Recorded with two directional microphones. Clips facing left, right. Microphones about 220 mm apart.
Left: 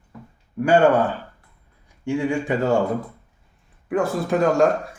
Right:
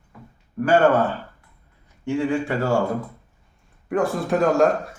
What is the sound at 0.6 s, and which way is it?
Speech, 15° left (ahead or behind).